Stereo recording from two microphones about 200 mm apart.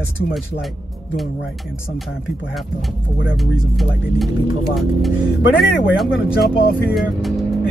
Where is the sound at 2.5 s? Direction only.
Centre (ahead or behind).